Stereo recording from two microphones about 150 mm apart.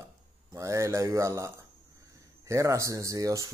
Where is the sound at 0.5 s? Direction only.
20° right (ahead or behind).